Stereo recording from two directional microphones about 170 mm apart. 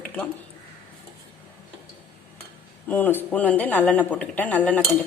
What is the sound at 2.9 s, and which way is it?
Speech, 10° left (ahead or behind).